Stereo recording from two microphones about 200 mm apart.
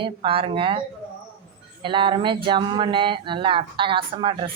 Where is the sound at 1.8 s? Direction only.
25° right (ahead or behind).